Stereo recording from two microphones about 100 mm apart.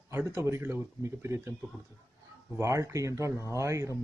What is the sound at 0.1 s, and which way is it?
Speech, 20° right (ahead or behind).